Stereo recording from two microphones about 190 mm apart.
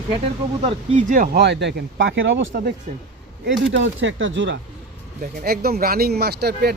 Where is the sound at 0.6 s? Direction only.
45° right (ahead or behind); by 2.5 s 80° right.